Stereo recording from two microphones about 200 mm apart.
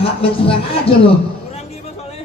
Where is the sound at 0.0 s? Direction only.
30° left (ahead or behind).